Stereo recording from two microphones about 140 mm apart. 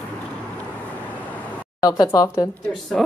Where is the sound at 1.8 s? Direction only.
25° left (ahead or behind).